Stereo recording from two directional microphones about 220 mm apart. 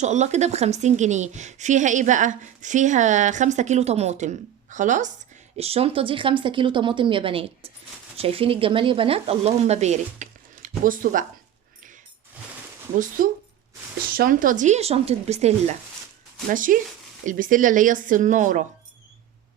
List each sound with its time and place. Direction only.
0.0 s a woman's voice: 30° right (ahead or behind)
13.2 s a woman's voice: 40° right (ahead or behind)